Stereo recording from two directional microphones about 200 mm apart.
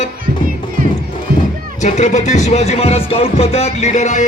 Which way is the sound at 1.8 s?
35° left (ahead or behind).